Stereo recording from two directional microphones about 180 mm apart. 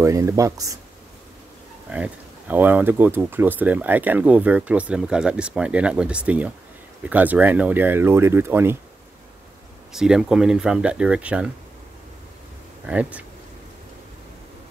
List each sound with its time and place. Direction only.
0.0 s speech: 15° right (ahead or behind)
1.9 s speech: 10° right (ahead or behind)
9.9 s speech: 5° right (ahead or behind)
12.8 s speech: 5° right (ahead or behind)